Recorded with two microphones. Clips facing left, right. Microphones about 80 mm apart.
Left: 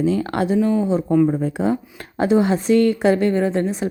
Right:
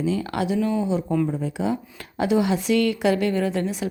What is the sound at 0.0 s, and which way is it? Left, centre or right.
Speech, left.